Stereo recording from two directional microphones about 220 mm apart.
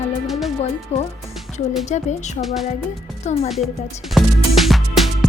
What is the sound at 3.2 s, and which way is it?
Speech, 30° left (ahead or behind).